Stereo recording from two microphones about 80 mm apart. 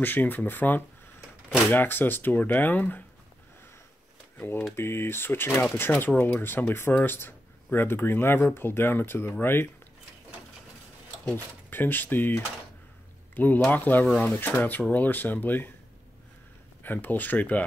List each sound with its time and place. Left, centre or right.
0.0 s speech: left
4.4 s speech: left
11.3 s speech: left
14.0 s speech: centre
14.3 s speech: left
16.8 s speech: left